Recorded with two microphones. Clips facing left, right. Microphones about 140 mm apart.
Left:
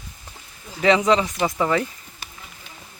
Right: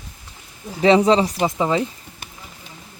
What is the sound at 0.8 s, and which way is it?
Speech, 30° right (ahead or behind).